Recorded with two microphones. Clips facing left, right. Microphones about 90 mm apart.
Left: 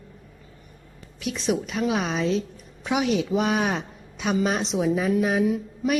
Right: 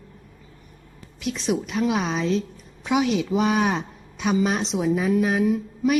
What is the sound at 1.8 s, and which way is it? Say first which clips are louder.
Speech: right 1 dB; 5° right (ahead or behind).